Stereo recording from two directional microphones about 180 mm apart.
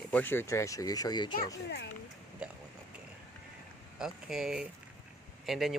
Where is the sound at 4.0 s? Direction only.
Centre (ahead or behind).